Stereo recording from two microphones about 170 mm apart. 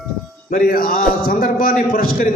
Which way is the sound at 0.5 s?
55° left (ahead or behind).